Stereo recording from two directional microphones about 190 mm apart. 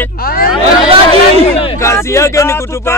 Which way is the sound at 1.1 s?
30° left (ahead or behind).